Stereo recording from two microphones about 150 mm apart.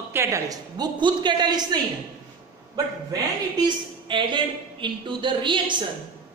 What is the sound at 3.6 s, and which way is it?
Speech, 35° right (ahead or behind).